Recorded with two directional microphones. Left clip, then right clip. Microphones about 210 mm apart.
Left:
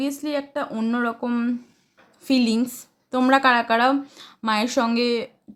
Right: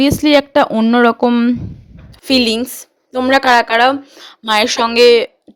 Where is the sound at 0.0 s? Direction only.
40° right (ahead or behind).